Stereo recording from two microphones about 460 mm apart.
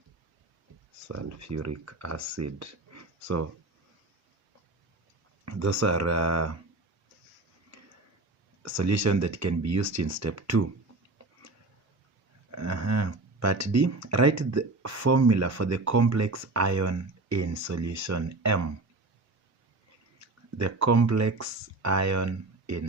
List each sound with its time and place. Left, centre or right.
1.0 s speech: right
5.5 s speech: right
8.6 s speech: right
12.5 s speech: right
20.6 s speech: right